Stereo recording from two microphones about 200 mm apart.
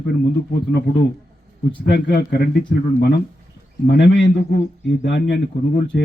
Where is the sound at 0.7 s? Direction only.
50° left (ahead or behind).